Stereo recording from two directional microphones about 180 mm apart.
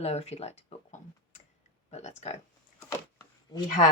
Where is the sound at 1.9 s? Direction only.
35° left (ahead or behind).